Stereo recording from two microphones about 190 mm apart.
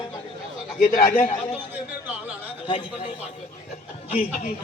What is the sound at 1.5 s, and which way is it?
A man's voice, 10° right (ahead or behind).